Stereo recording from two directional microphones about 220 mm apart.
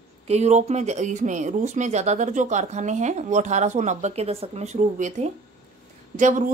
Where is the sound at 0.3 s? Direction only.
30° right (ahead or behind).